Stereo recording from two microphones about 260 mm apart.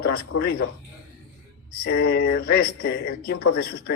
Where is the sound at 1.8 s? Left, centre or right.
Left.